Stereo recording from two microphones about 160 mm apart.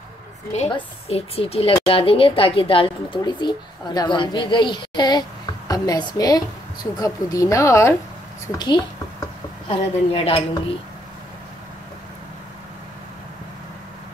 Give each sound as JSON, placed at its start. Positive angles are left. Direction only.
{"t": 0.7, "sound": "a woman's voice", "side_deg": 35}